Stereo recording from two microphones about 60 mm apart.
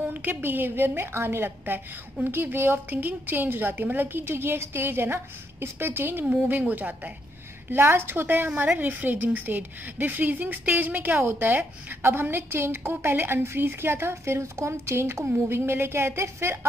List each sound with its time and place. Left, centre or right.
0.0 s a woman's voice: right